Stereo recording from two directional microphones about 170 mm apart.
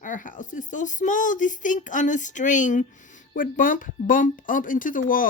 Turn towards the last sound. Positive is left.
turn(degrees=50)  # may be behind; listen again after turning